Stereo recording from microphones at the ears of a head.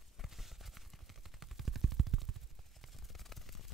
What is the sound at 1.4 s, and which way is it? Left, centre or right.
Machine gun, right.